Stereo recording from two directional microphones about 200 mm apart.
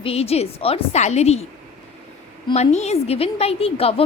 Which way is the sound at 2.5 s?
35° left (ahead or behind).